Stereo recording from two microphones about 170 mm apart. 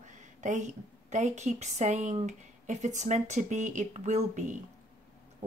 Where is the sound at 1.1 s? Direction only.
45° right (ahead or behind).